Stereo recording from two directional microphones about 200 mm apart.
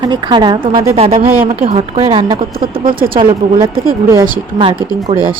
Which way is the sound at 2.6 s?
45° right (ahead or behind).